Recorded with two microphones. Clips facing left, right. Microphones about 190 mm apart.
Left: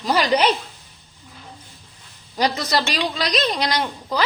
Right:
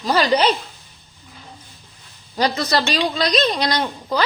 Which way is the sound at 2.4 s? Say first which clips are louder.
Right 2 dB; 15° left (ahead or behind).